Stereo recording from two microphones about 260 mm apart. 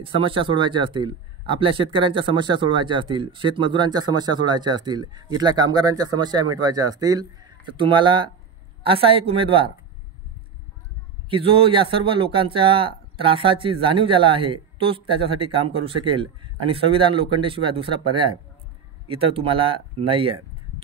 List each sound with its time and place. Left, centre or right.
0.0 s a man's voice: centre
11.2 s a man's voice: right